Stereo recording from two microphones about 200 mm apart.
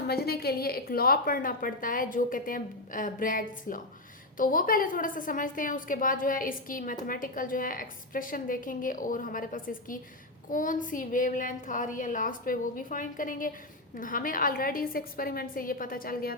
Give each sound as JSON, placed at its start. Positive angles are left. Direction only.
{"t": 0.1, "sound": "a woman's voice", "side_deg": 50}